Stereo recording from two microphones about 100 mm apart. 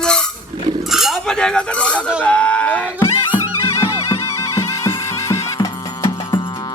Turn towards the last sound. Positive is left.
turn(degrees=45)  # may be behind; listen again after turning